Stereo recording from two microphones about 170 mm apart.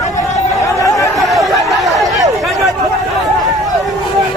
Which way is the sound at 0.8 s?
20° left (ahead or behind).